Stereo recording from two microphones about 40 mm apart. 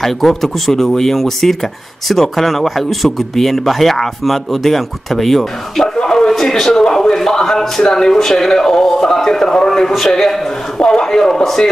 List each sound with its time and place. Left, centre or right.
0.0 s speech: centre
5.9 s a sound: centre
6.5 s a man's voice: centre